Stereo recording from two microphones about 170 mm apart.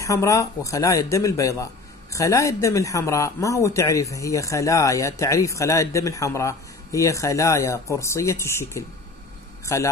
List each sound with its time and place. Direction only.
0.0 s speech: 20° left (ahead or behind)